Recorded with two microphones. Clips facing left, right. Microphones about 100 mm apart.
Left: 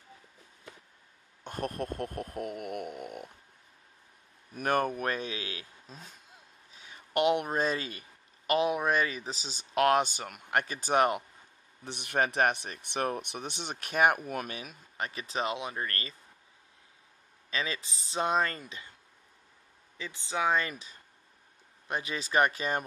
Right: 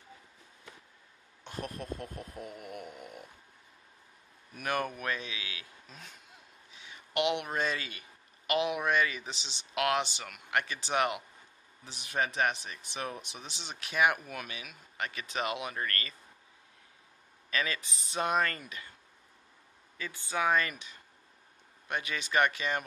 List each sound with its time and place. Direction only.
1.4 s speech: 50° left (ahead or behind)
4.6 s speech: 45° left (ahead or behind)
11.8 s speech: 60° left (ahead or behind); by 16.2 s 25° left (ahead or behind)
17.5 s speech: 25° left (ahead or behind)
20.0 s speech: 20° left (ahead or behind); by 22.8 s 35° left (ahead or behind)